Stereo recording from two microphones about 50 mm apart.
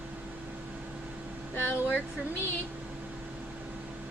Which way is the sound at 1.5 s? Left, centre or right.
Left.